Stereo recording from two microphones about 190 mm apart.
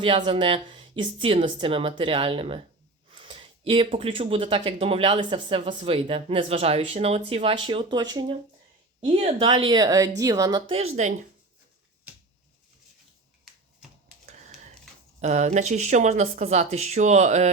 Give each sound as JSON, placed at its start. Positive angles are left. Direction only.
{"t": 0.3, "sound": "speech", "side_deg": -30}
{"t": 14.3, "sound": "a sound", "side_deg": -35}
{"t": 15.2, "sound": "speech", "side_deg": -35}